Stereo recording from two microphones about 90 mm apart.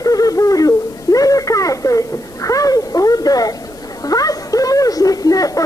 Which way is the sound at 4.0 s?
40° left (ahead or behind).